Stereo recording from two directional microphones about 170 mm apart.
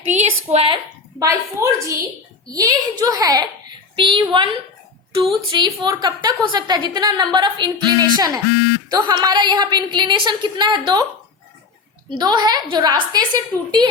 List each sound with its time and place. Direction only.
0.1 s a sound: 40° right (ahead or behind)
1.2 s a woman's voice: 20° right (ahead or behind)
12.1 s a woman's voice: 25° right (ahead or behind)